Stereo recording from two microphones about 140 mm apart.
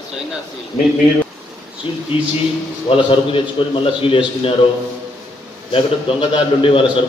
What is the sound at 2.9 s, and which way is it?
A man's voice, 40° left (ahead or behind).